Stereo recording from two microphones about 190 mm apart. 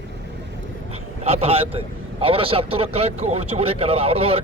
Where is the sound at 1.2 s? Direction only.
30° right (ahead or behind).